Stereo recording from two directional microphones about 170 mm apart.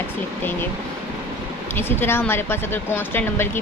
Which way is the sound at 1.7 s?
15° left (ahead or behind).